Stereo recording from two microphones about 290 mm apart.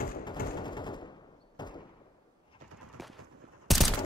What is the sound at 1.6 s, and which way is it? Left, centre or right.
Door, centre.